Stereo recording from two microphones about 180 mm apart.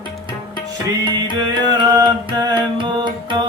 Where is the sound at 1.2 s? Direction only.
25° right (ahead or behind).